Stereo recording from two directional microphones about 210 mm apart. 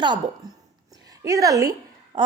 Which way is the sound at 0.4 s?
15° right (ahead or behind).